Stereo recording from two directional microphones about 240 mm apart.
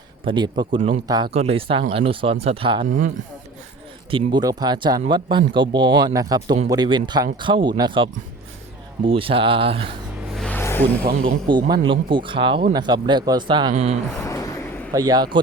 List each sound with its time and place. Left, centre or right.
0.3 s speech: centre
4.1 s speech: centre
10.3 s a sound: centre
11.4 s speech: centre
14.2 s a sound: centre
14.9 s speech: centre